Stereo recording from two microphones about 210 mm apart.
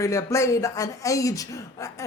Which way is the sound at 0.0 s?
15° left (ahead or behind).